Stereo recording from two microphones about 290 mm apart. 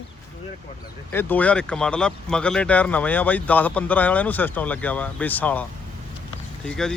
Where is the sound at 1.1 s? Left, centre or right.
Centre.